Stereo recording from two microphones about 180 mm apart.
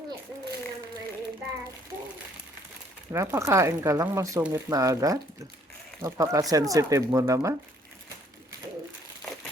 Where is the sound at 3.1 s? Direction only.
15° right (ahead or behind).